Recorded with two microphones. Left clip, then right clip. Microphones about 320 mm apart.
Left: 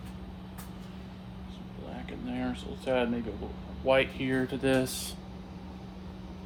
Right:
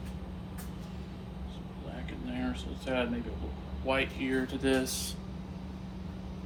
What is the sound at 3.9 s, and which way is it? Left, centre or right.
Speech, left.